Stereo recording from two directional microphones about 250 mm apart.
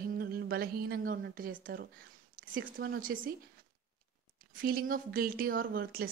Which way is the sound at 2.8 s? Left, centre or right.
Right.